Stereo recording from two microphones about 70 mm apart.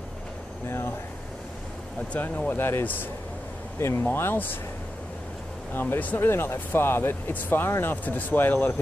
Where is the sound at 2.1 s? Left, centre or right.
Left.